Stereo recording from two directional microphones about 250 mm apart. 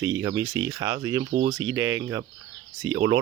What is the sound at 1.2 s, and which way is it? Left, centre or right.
Speech, right.